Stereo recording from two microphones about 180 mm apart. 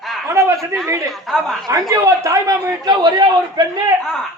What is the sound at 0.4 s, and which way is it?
Speech, 15° right (ahead or behind).